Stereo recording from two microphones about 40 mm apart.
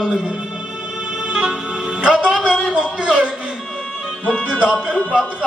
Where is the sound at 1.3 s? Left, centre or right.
Right.